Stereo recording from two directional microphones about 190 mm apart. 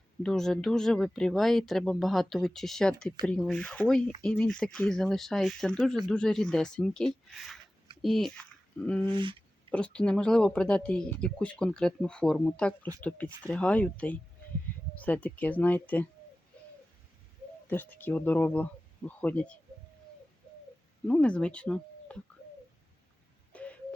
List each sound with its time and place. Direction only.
0.2 s speech: centre (ahead or behind)
9.0 s speech: 25° right (ahead or behind)
9.7 s speech: 5° left (ahead or behind)
17.7 s speech: 10° left (ahead or behind)
21.1 s speech: 5° left (ahead or behind)
23.5 s telephone dialing: 5° left (ahead or behind)